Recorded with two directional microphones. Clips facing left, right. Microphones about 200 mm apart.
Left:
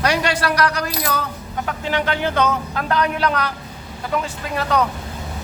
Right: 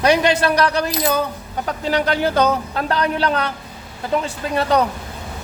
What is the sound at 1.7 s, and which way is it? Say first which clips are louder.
A man's voice: right 3 dB; 35° right (ahead or behind).